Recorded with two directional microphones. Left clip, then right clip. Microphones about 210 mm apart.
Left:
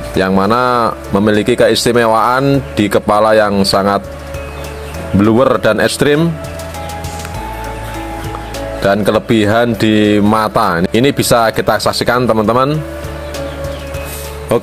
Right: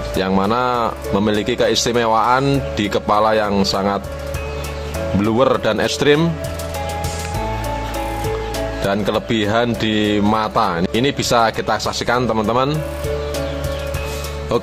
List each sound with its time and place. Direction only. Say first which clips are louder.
0.4 s speech: left 6 dB; 15° left (ahead or behind)
2.4 s speech: left 5 dB; 5° left (ahead or behind)
2.8 s speech: left 5 dB; 15° left (ahead or behind)
5.2 s speech: left 6 dB; 15° left (ahead or behind)
8.8 s speech: left 8 dB; 15° left (ahead or behind)
14.5 s speech: left 6 dB; 10° left (ahead or behind)